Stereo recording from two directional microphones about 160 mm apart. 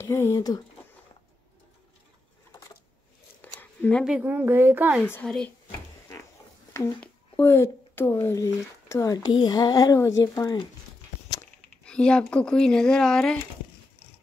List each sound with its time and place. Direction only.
0.0 s a child's voice: 15° left (ahead or behind)
4.0 s a woman's voice: 10° right (ahead or behind)
5.0 s a woman's voice: 15° left (ahead or behind)
5.7 s a sound: 20° left (ahead or behind)
6.7 s a child's voice: 15° left (ahead or behind)
11.8 s speech: 5° left (ahead or behind)